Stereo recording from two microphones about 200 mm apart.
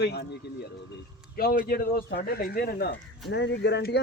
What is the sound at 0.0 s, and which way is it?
Speech, 55° left (ahead or behind).